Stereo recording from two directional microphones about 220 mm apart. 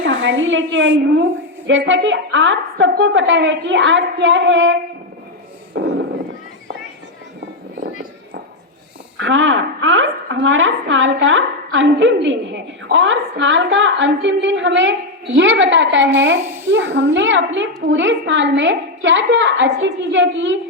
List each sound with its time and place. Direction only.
0.0 s a woman's voice: 60° right (ahead or behind)
9.1 s a woman's voice: 60° right (ahead or behind)
16.4 s a child's voice: 10° right (ahead or behind)
16.7 s a woman's voice: 55° right (ahead or behind)